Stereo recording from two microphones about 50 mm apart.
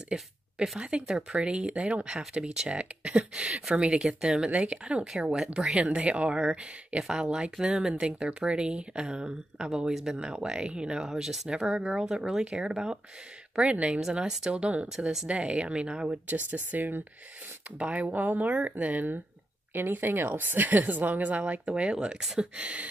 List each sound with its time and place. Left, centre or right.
0.1 s speech: centre
1.0 s speech: centre
1.4 s speech: right
5.0 s speech: centre
15.0 s speech: centre
16.3 s a woman's voice: right
17.7 s a woman's voice: right
19.7 s a woman's voice: right